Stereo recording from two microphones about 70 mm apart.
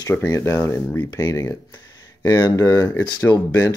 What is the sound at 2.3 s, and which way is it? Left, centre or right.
Speech, left.